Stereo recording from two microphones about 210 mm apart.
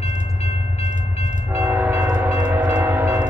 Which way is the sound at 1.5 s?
10° right (ahead or behind).